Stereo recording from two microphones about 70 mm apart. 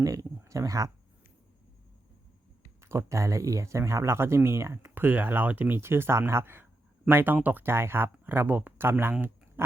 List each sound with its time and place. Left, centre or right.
0.0 s speech: right
2.8 s speech: right
4.9 s speech: right
9.6 s dog: right